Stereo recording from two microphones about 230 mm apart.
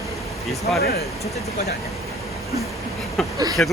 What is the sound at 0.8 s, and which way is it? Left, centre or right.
Speech, left.